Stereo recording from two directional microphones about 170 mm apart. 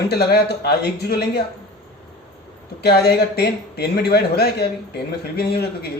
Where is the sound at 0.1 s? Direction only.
70° left (ahead or behind).